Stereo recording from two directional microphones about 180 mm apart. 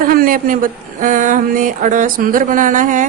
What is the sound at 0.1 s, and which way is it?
Speech, 55° right (ahead or behind).